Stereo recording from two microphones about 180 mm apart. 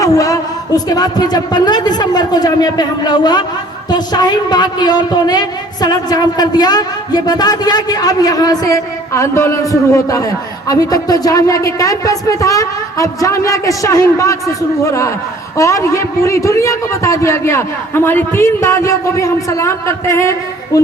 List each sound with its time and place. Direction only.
0.0 s a woman's voice: 20° left (ahead or behind)